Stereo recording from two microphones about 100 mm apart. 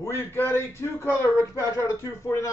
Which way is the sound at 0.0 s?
25° left (ahead or behind).